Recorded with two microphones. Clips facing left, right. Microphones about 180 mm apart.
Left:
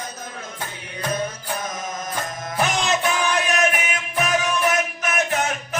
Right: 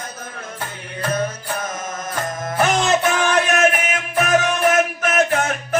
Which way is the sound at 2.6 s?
50° right (ahead or behind).